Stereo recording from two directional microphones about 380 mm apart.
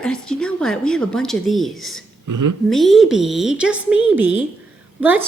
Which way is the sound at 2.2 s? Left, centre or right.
Right.